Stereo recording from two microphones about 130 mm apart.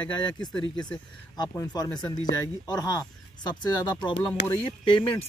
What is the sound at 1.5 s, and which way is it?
Speech, 25° left (ahead or behind).